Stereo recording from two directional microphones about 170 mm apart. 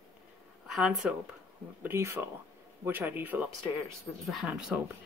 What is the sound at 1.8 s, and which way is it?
A man's voice, 15° right (ahead or behind).